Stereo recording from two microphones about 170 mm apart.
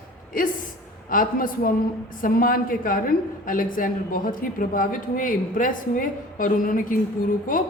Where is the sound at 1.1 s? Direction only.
55° left (ahead or behind).